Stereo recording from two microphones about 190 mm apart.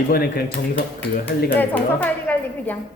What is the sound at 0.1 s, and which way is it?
Speech, 55° left (ahead or behind).